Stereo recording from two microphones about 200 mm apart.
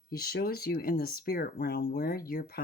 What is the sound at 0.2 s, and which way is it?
Speech, 50° left (ahead or behind).